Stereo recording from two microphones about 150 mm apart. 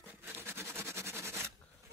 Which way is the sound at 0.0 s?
15° right (ahead or behind).